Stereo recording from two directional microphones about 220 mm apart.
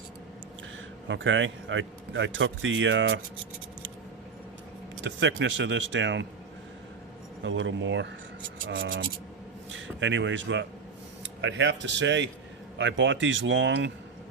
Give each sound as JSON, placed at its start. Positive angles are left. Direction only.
{"t": 1.0, "sound": "a man's voice", "side_deg": -55}
{"t": 5.0, "sound": "a man's voice", "side_deg": -55}
{"t": 7.4, "sound": "a man's voice", "side_deg": -55}